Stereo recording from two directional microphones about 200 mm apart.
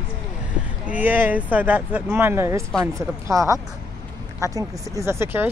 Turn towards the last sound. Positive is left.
turn(degrees=-10)  # may be behind; listen again after turning